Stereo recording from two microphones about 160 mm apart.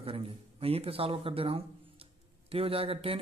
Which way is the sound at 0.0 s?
35° right (ahead or behind).